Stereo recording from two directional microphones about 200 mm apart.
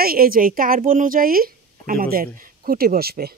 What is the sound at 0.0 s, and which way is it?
A woman's voice, 45° right (ahead or behind).